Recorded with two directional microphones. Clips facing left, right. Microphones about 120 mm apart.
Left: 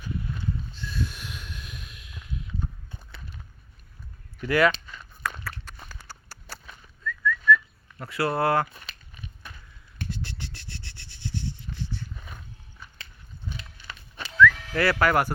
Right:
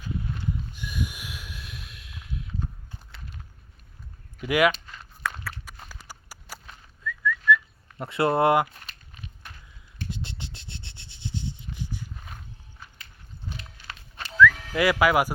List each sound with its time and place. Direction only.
0.7 s snort: 15° right (ahead or behind)
4.4 s speech: 10° right (ahead or behind)
5.2 s a sound: 5° right (ahead or behind)
7.0 s whistling: 10° right (ahead or behind)
7.9 s speech: 25° right (ahead or behind)
10.1 s rub: 20° right (ahead or behind)
14.7 s speech: 15° right (ahead or behind)